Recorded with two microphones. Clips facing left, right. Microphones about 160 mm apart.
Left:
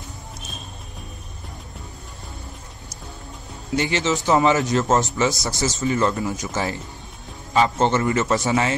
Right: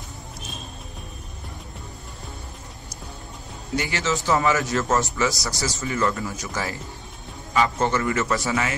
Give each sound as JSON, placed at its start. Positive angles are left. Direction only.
{"t": 3.7, "sound": "a man's voice", "side_deg": 20}